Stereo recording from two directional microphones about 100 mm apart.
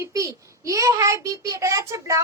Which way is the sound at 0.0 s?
30° right (ahead or behind).